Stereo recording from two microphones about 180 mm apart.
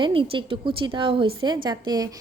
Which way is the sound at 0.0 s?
30° right (ahead or behind).